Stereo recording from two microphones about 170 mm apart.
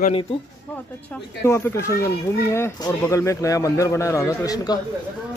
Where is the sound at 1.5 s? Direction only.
15° left (ahead or behind).